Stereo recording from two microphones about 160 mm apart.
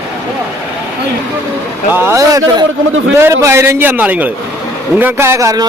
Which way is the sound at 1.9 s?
15° right (ahead or behind).